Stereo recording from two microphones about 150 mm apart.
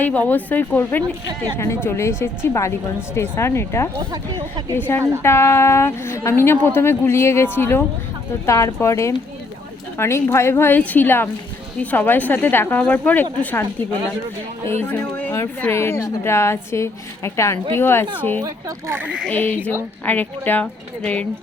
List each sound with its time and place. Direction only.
0.0 s a woman's voice: 10° left (ahead or behind)
4.1 s speech: 25° right (ahead or behind)
4.7 s a woman's voice: 15° left (ahead or behind)